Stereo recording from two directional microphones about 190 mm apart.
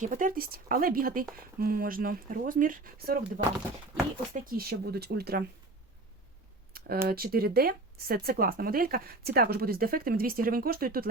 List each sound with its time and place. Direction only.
0.0 s speech: 40° right (ahead or behind)
6.7 s a sound: 50° right (ahead or behind)
7.1 s speech: 50° right (ahead or behind)